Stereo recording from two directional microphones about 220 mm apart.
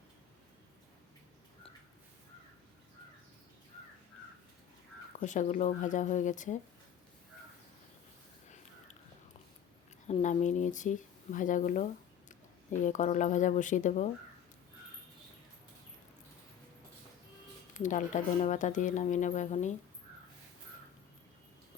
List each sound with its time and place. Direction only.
5.1 s speech: 35° left (ahead or behind)
10.1 s speech: 30° left (ahead or behind)
17.7 s speech: 35° left (ahead or behind)